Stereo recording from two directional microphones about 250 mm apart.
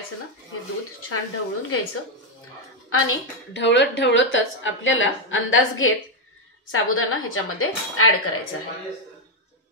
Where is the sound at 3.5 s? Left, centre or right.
Left.